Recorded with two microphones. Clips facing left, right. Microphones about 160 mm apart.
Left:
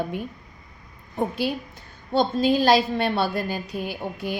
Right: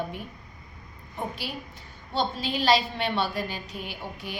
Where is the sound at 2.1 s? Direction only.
45° left (ahead or behind).